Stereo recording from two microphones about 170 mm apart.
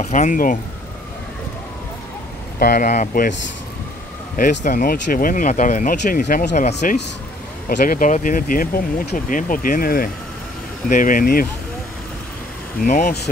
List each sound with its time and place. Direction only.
0.0 s speech: 45° left (ahead or behind)
2.6 s speech: 60° left (ahead or behind)
2.9 s speech: 45° left (ahead or behind)
4.4 s speech: 50° left (ahead or behind)
12.8 s speech: 50° left (ahead or behind)